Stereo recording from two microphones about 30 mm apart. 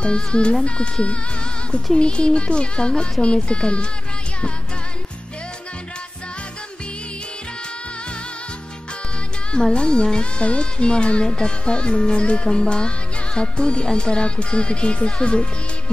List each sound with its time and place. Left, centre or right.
0.0 s speech: left
2.0 s speech: left
9.6 s speech: left